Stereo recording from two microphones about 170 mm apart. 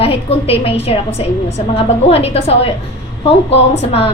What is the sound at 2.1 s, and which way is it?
Speech, 35° left (ahead or behind).